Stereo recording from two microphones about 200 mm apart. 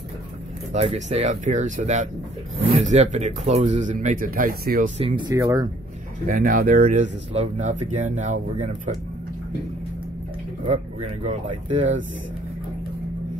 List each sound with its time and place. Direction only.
0.7 s speech: 35° right (ahead or behind)
4.9 s speech: 25° right (ahead or behind)
6.2 s speech: 45° right (ahead or behind)
10.6 s speech: 35° right (ahead or behind)